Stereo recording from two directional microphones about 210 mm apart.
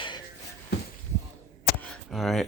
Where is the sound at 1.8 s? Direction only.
5° left (ahead or behind).